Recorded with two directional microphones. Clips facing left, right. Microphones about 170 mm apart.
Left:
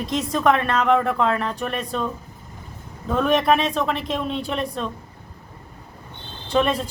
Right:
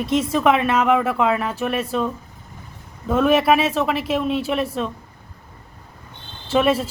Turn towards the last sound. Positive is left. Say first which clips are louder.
# right 3 dB
turn(degrees=-5)  # may be behind; listen again after turning